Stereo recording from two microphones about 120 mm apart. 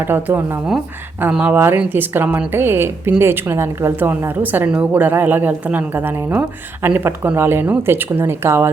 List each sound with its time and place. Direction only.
0.0 s a woman's voice: 15° right (ahead or behind)